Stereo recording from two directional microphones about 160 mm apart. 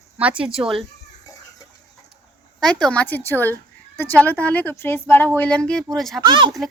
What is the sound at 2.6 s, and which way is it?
A woman's voice, 5° left (ahead or behind).